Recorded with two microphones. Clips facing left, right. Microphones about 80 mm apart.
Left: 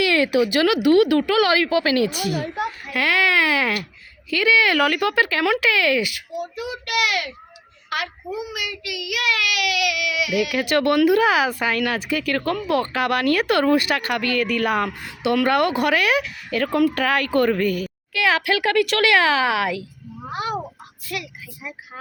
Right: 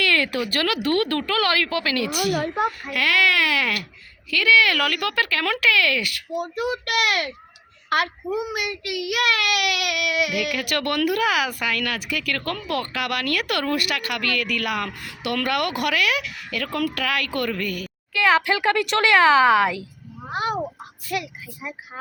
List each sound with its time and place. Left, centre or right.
0.0 s speech: centre
2.4 s a woman's voice: right
2.9 s speech: left
6.3 s a child's voice: right
10.6 s speech: left
17.0 s speech: left
18.1 s a woman's voice: centre
20.3 s a woman's voice: right